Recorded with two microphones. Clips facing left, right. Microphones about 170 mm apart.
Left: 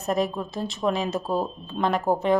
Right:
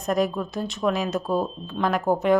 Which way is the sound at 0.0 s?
Centre (ahead or behind).